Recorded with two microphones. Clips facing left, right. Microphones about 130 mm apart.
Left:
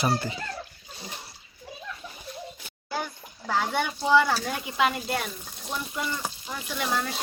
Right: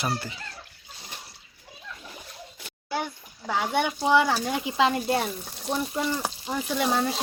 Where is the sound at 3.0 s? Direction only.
15° right (ahead or behind).